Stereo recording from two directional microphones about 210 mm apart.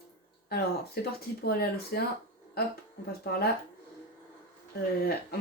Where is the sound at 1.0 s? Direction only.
50° left (ahead or behind).